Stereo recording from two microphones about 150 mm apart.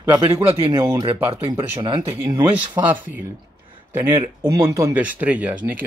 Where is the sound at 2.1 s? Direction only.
15° right (ahead or behind).